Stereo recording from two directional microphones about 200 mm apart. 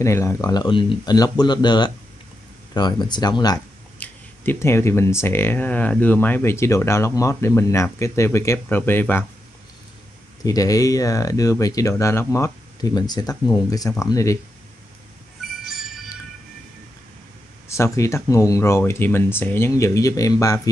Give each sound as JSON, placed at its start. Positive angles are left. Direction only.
{"t": 0.0, "sound": "speech", "side_deg": 15}
{"t": 10.4, "sound": "speech", "side_deg": 15}
{"t": 17.6, "sound": "speech", "side_deg": 15}